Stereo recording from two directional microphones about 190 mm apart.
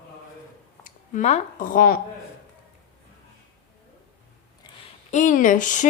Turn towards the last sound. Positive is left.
turn(degrees=40)  # may be behind; listen again after turning